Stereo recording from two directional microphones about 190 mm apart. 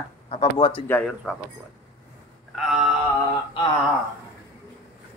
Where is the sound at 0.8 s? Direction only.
5° left (ahead or behind).